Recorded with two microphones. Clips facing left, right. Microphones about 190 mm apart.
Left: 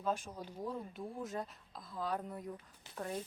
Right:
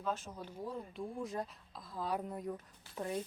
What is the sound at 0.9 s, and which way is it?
Speech, centre (ahead or behind).